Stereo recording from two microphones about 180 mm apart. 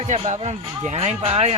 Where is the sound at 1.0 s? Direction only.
35° right (ahead or behind).